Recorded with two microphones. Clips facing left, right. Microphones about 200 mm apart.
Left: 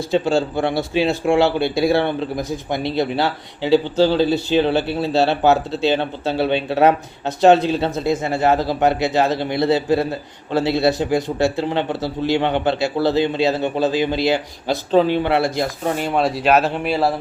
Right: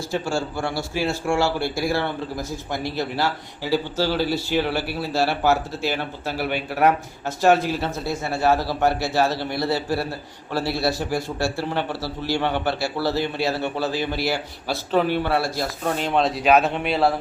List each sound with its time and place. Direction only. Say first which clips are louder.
0.1 s a man's voice: left 8 dB; 20° left (ahead or behind)
16.0 s speech: left 1 dB; 10° left (ahead or behind)